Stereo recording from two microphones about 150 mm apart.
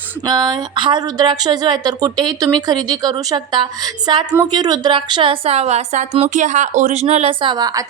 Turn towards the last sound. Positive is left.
turn(degrees=-25)  # may be behind; listen again after turning